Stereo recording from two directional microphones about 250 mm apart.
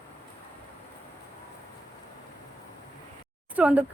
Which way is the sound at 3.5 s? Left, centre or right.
Centre.